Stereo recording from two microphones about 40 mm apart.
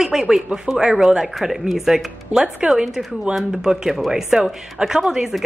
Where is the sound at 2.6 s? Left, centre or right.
Right.